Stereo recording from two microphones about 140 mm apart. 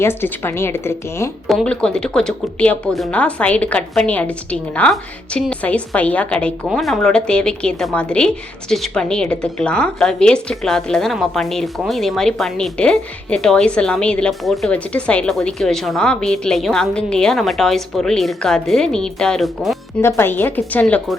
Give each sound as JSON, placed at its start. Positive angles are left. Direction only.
{"t": 0.0, "sound": "a woman's voice", "side_deg": 15}
{"t": 1.5, "sound": "a woman's voice", "side_deg": 5}
{"t": 20.0, "sound": "a woman's voice", "side_deg": 15}